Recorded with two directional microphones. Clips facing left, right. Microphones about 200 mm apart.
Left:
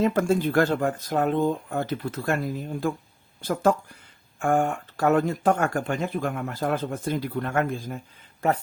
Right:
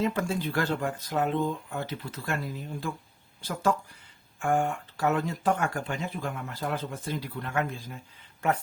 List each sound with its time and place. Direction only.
0.0 s speech: 45° left (ahead or behind)